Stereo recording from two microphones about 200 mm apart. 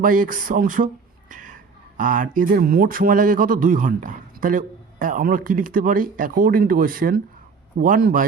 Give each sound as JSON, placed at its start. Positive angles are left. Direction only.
{"t": 0.0, "sound": "a man's voice", "side_deg": -45}
{"t": 1.3, "sound": "a sound", "side_deg": -40}
{"t": 2.0, "sound": "a man's voice", "side_deg": -40}